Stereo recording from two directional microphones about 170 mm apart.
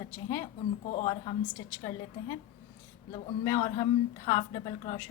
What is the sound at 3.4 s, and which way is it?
A woman's voice, 20° left (ahead or behind).